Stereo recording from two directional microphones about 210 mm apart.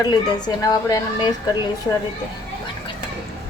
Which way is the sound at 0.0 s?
20° left (ahead or behind).